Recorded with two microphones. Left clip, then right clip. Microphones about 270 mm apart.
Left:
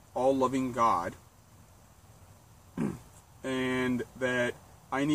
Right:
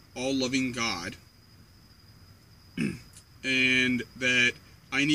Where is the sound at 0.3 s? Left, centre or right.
Left.